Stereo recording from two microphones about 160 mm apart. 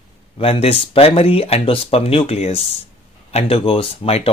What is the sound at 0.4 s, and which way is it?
Speech, 35° left (ahead or behind).